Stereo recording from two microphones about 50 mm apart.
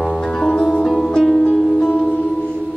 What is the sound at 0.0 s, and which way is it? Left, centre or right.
Music, centre.